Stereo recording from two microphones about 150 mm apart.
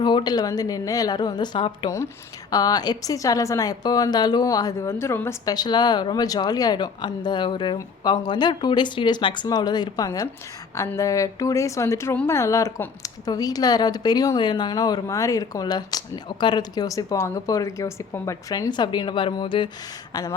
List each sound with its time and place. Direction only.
0.0 s a woman's voice: 30° left (ahead or behind)